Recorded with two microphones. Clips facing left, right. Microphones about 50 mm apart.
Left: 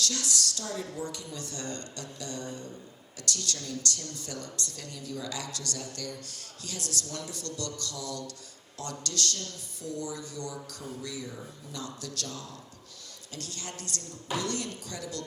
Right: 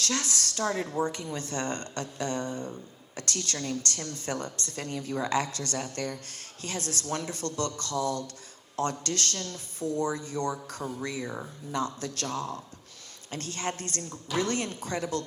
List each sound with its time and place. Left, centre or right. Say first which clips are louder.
0.0 s a woman's voice: right 1 dB; right
11.3 s speech: right 6 dB; right
11.8 s a woman's voice: right 7 dB; right